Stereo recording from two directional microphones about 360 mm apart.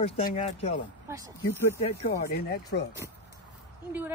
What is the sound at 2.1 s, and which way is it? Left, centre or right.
Speech, left.